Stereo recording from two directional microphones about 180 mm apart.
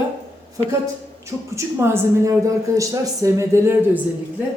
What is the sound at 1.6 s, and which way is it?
A woman's voice, 15° right (ahead or behind).